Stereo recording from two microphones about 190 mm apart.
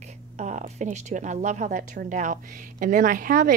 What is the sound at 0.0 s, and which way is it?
Speech, 40° right (ahead or behind).